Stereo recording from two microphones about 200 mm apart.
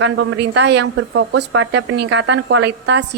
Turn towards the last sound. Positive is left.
turn(degrees=-60)  # may be behind; listen again after turning